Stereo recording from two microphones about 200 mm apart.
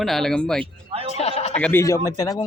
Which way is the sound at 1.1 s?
35° left (ahead or behind).